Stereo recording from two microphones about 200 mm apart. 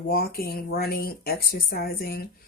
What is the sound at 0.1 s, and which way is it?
Speech, 50° left (ahead or behind).